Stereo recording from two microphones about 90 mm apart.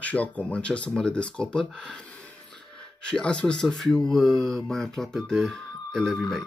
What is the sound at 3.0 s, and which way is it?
Speech, 10° left (ahead or behind).